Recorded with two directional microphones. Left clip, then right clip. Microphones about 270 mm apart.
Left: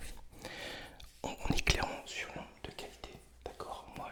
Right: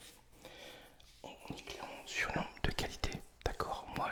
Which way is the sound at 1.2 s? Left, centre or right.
Left.